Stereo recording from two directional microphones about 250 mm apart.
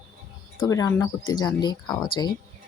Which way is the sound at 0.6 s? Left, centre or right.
Centre.